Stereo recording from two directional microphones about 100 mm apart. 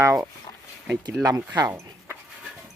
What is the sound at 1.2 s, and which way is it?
Speech, 35° right (ahead or behind).